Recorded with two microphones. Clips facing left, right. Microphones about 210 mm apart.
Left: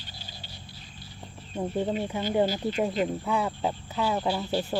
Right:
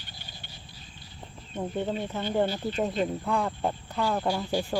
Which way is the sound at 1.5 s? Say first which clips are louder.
Left 2 dB; 10° left (ahead or behind).